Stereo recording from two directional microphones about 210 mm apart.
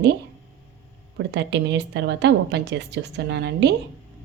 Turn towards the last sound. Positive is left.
turn(degrees=-55)  # may be behind; listen again after turning